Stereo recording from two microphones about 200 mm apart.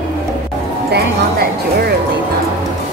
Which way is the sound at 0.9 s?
55° right (ahead or behind).